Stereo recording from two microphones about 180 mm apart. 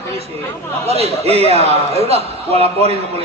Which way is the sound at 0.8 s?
35° right (ahead or behind).